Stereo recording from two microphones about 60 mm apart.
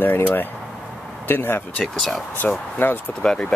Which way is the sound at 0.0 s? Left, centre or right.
Left.